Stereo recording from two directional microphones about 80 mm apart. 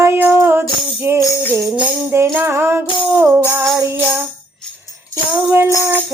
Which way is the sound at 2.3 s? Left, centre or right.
Right.